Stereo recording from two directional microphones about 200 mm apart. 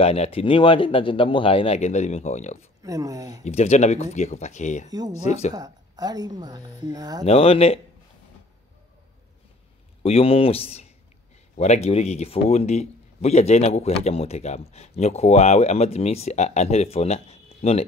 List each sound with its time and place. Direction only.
0.0 s speech: 30° left (ahead or behind)
2.8 s speech: 15° right (ahead or behind)
3.4 s speech: 35° left (ahead or behind)
4.8 s a woman's voice: 20° right (ahead or behind)
5.2 s speech: 35° left (ahead or behind)
5.5 s a woman's voice: 20° right (ahead or behind)
7.2 s speech: 30° left (ahead or behind)
10.0 s speech: 30° left (ahead or behind)